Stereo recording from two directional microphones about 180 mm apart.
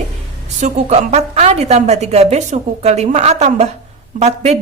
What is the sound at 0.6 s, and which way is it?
A woman's voice, 35° right (ahead or behind).